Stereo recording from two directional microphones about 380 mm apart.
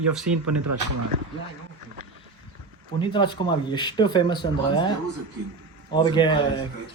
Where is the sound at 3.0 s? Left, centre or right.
Centre.